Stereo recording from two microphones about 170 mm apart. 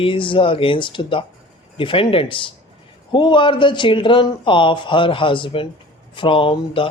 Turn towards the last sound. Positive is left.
turn(degrees=30)  # may be behind; listen again after turning